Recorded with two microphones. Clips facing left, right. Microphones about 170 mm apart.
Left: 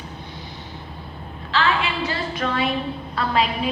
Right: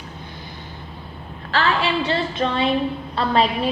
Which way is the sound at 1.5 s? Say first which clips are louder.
Right 2 dB; 35° right (ahead or behind).